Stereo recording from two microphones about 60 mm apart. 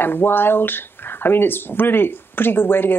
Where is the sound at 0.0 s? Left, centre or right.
Left.